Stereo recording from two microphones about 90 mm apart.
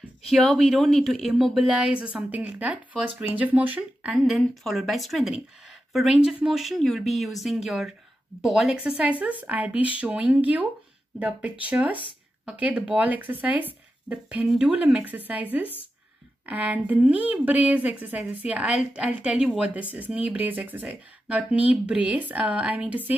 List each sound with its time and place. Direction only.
0.3 s speech: centre (ahead or behind)
1.8 s speech: 10° right (ahead or behind)
4.4 s speech: centre (ahead or behind); by 23.1 s 15° right (ahead or behind)